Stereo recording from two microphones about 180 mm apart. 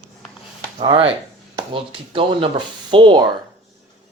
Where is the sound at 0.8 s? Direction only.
30° right (ahead or behind).